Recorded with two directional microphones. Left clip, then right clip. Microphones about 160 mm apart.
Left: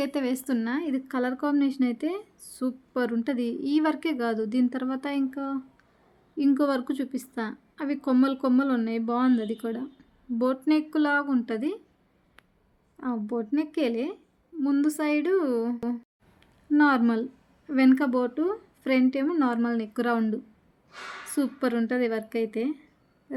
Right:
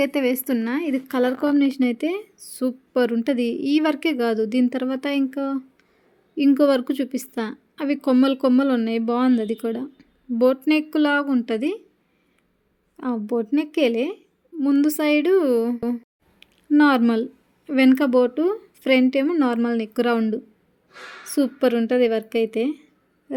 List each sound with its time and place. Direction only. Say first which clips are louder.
0.0 s a woman's voice: right 7 dB; 15° right (ahead or behind)
13.0 s a woman's voice: right 6 dB; 20° right (ahead or behind)